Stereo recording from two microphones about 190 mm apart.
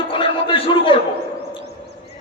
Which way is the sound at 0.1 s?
30° left (ahead or behind).